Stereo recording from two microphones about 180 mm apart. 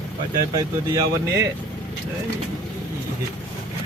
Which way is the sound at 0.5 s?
20° right (ahead or behind).